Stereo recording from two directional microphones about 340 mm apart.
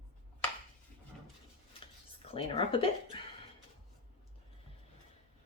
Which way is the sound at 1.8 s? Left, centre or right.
Centre.